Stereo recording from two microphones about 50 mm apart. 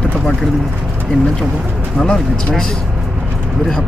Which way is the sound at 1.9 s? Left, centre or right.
Centre.